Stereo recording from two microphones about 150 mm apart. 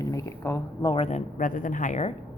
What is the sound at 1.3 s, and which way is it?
Speech, 60° left (ahead or behind).